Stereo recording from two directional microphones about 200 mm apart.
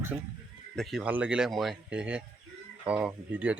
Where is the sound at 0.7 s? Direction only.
Centre (ahead or behind).